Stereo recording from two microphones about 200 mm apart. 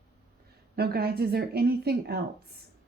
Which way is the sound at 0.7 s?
50° right (ahead or behind).